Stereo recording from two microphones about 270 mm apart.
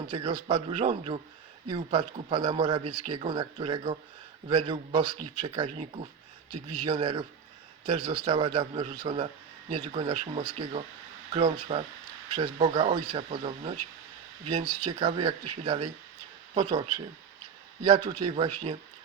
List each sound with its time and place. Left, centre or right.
0.1 s a man's voice: centre
6.5 s a man's voice: right
6.8 s a man's voice: right